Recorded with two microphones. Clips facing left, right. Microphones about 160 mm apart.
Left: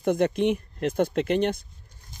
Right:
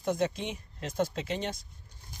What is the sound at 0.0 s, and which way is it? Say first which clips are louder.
Speech: left 8 dB; 60° left (ahead or behind).